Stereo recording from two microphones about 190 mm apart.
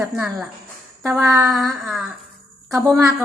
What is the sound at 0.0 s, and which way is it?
A woman's voice, centre (ahead or behind).